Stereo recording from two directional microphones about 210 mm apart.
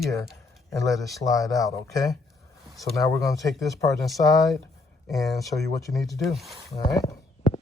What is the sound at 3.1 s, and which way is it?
Speech, 15° left (ahead or behind).